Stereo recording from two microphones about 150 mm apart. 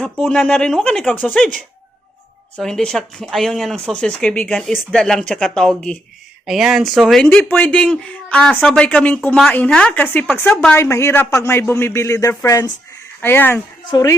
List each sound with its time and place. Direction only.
0.0 s speech: 5° left (ahead or behind)
2.6 s speech: 5° left (ahead or behind); by 14.2 s 25° left (ahead or behind)